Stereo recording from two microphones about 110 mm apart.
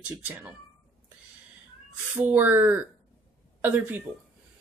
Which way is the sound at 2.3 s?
15° right (ahead or behind).